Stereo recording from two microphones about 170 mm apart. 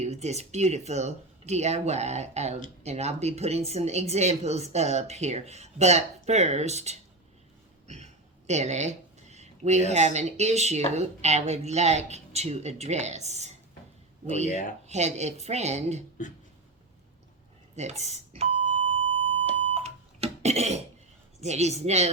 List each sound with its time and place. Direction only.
0.0 s speech: 40° right (ahead or behind)
14.4 s speech: 45° left (ahead or behind)
14.8 s speech: 40° right (ahead or behind)
17.7 s beep: 40° right (ahead or behind)
21.4 s speech: 40° right (ahead or behind)